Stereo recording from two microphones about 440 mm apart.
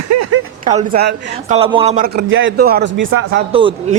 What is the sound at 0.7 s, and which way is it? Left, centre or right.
Speech, centre.